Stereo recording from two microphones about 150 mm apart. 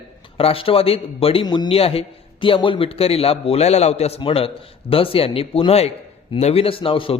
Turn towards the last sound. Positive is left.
turn(degrees=35)  # may be behind; listen again after turning